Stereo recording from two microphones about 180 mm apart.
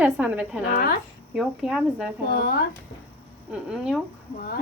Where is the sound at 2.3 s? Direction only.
55° left (ahead or behind).